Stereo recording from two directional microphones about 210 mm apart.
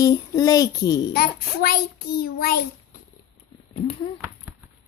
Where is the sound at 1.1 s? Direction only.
45° left (ahead or behind).